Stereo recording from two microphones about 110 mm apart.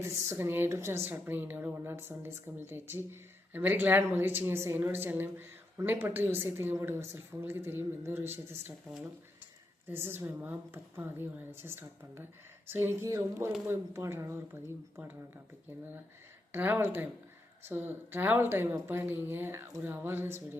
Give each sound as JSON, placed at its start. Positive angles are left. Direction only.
{"t": 0.3, "sound": "a woman's voice", "side_deg": -25}
{"t": 9.9, "sound": "a woman's voice", "side_deg": -20}
{"t": 16.5, "sound": "a woman's voice", "side_deg": -15}